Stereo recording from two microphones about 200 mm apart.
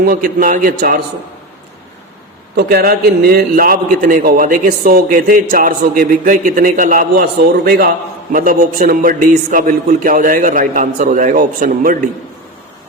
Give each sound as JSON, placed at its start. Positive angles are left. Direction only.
{"t": 0.0, "sound": "a man's voice", "side_deg": -45}
{"t": 2.6, "sound": "a man's voice", "side_deg": -50}